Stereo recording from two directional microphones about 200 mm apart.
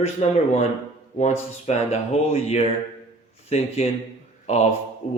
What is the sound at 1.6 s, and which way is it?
Speech, 35° left (ahead or behind).